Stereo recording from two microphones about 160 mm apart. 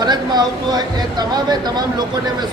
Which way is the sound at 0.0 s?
25° right (ahead or behind).